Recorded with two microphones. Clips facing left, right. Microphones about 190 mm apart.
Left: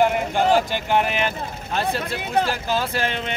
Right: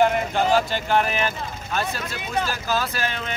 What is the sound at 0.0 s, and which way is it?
Speech, 15° left (ahead or behind).